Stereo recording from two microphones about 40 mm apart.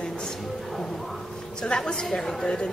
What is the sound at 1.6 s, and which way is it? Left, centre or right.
Speech, left.